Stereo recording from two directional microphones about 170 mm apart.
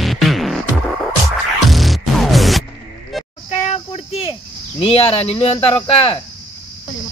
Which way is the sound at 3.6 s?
40° left (ahead or behind).